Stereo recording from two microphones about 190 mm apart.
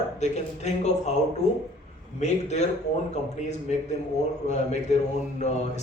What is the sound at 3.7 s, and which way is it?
A man's voice, 35° left (ahead or behind).